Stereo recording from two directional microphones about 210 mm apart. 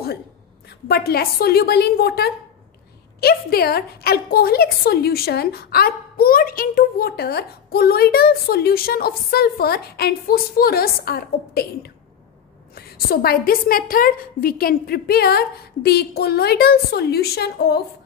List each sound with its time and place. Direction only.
0.7 s a woman's voice: 50° left (ahead or behind)